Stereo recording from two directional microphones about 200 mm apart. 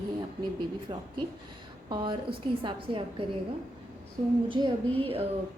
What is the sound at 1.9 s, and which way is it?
A woman's voice, 25° right (ahead or behind).